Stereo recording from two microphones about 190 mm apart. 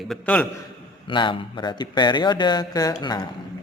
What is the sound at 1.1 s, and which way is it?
Speech, 25° left (ahead or behind).